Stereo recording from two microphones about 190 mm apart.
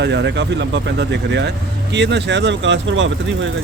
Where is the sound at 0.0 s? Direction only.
65° right (ahead or behind); by 3.5 s 80° right.